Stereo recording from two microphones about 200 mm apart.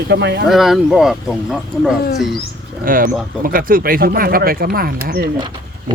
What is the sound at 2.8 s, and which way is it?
Speech, 45° right (ahead or behind).